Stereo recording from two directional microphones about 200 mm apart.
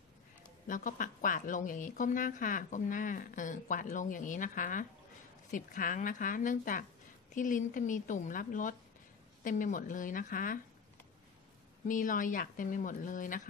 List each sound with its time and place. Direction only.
0.7 s a woman's voice: 40° left (ahead or behind)
11.9 s a woman's voice: 40° left (ahead or behind)